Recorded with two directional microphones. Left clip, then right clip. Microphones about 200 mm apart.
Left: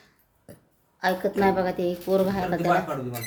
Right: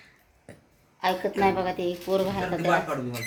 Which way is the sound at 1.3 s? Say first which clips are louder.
Left 1 dB; 25° left (ahead or behind).